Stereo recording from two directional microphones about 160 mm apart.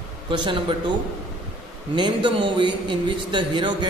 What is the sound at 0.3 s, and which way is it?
Speech, 30° right (ahead or behind).